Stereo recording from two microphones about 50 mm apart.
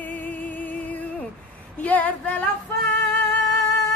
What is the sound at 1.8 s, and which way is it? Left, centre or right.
Female singing, left.